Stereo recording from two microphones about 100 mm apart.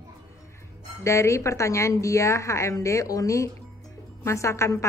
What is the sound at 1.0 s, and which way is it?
A woman's voice, 30° left (ahead or behind).